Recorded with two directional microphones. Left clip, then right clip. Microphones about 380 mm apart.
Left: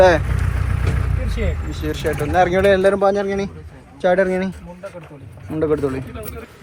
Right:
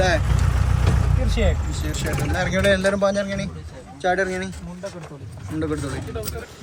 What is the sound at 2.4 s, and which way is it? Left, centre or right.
Speech, centre.